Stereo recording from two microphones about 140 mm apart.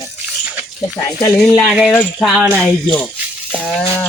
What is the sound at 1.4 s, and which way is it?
Speech, centre (ahead or behind).